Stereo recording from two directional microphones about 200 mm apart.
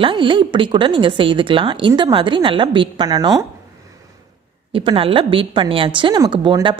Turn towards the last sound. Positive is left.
turn(degrees=-25)  # may be behind; listen again after turning